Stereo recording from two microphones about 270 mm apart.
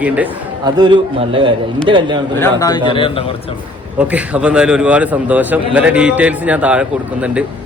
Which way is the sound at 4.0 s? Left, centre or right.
Centre.